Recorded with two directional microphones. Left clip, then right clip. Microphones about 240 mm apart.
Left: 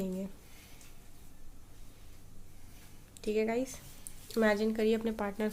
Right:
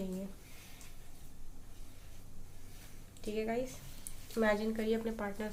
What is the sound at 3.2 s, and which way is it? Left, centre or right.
Speech, left.